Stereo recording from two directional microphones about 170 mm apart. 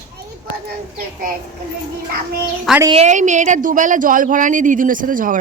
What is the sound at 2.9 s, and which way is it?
Speech, 40° right (ahead or behind).